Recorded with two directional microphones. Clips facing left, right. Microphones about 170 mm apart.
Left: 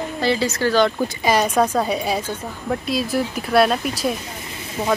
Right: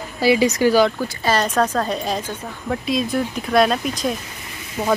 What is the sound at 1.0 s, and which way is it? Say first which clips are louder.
Speech: left 2 dB; 15° left (ahead or behind).